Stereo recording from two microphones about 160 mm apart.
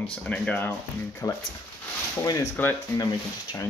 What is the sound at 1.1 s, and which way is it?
Speech, 20° left (ahead or behind).